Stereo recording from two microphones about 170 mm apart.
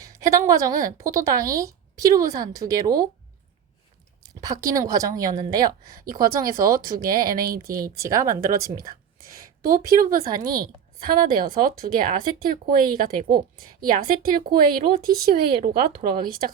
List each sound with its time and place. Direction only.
0.0 s a woman's voice: 20° right (ahead or behind)
4.2 s speech: 20° right (ahead or behind)
6.0 s speech: 60° right (ahead or behind)
7.9 s speech: 20° right (ahead or behind)
8.4 s speech: 60° right (ahead or behind)